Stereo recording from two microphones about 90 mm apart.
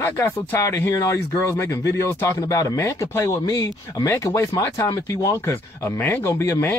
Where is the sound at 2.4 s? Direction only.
40° left (ahead or behind).